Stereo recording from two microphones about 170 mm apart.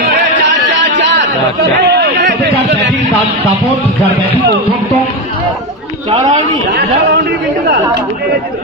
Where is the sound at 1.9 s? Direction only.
90° right.